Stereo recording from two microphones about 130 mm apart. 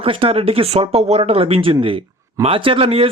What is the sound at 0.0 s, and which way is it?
Speech, 45° right (ahead or behind).